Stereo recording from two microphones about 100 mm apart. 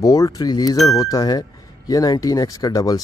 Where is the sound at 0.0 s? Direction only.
35° left (ahead or behind).